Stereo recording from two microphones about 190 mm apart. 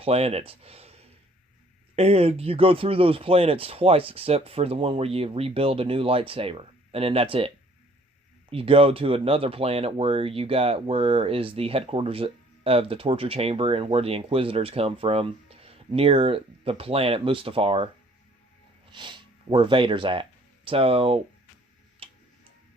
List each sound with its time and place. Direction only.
0.0 s speech: 30° right (ahead or behind)
18.9 s speech: 25° right (ahead or behind)
22.0 s tick-tock: 30° right (ahead or behind)